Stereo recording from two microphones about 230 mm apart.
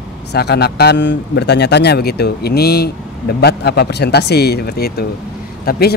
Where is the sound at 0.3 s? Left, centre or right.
Left.